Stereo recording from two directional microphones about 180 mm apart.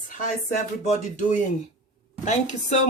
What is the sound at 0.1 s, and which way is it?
Speech, 45° left (ahead or behind).